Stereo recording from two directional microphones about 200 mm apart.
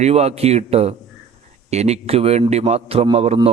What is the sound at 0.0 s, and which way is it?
A man's voice, 30° right (ahead or behind).